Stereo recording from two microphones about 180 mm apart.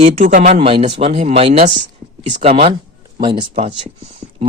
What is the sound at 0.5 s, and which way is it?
Speech, 30° right (ahead or behind).